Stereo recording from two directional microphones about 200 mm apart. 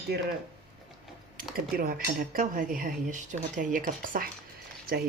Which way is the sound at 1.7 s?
50° right (ahead or behind).